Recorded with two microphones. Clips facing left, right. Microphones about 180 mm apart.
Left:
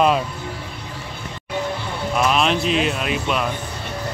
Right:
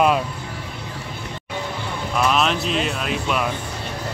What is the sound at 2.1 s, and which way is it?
Speech, 5° left (ahead or behind).